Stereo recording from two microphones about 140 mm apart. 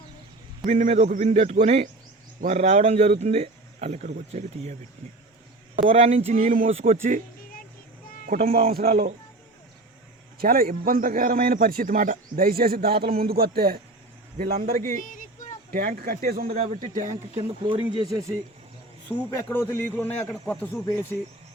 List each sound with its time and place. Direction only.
0.6 s a man's voice: 60° right (ahead or behind)
5.8 s a man's voice: 45° right (ahead or behind); by 7.2 s 65° right (ahead or behind)
8.3 s a man's voice: 90° right
10.3 s a man's voice: 90° right
15.0 s a sound: 70° left (ahead or behind)
15.7 s a man's voice: 90° right
16.8 s speech: 70° right (ahead or behind)
17.3 s speech: 40° right (ahead or behind); by 18.3 s 25° right (ahead or behind)
19.1 s a man's voice: 15° left (ahead or behind)